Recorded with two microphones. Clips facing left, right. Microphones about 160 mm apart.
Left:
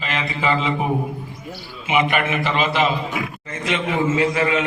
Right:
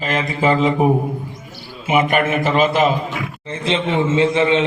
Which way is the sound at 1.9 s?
45° right (ahead or behind).